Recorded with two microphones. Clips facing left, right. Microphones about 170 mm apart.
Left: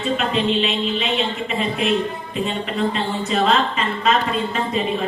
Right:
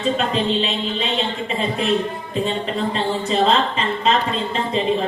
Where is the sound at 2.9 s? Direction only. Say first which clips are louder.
Right 1 dB; 30° right (ahead or behind).